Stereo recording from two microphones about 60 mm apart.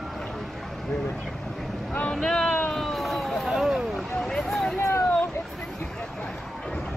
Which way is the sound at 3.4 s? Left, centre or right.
Centre.